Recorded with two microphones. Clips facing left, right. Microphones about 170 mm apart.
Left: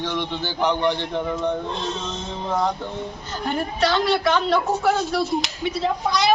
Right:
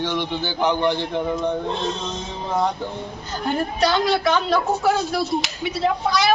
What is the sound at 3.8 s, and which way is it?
Speech, 15° right (ahead or behind).